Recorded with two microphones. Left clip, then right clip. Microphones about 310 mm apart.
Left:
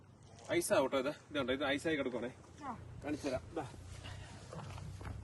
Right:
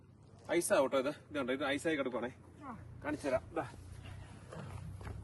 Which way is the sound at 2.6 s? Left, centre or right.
Left.